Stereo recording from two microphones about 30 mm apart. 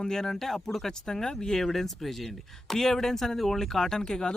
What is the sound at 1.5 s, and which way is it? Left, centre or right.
Speech, centre.